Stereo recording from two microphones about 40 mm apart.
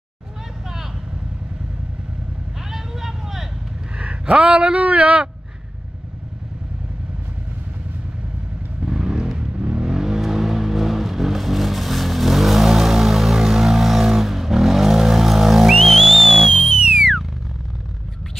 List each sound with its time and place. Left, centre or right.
2.7 s vehicle: centre
4.0 s speech: right
8.8 s vehicle: centre
16.4 s a sound: centre